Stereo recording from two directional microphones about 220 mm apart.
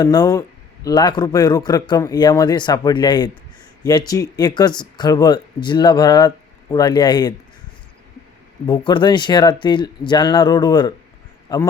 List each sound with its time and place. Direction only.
0.0 s speech: 15° left (ahead or behind)
8.6 s a man's voice: 20° left (ahead or behind)